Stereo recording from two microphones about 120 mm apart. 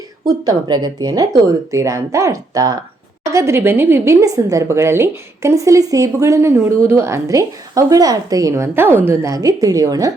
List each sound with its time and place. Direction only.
0.3 s a woman's voice: 35° right (ahead or behind)